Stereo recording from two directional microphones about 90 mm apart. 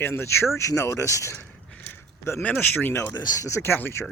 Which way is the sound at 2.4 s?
20° left (ahead or behind).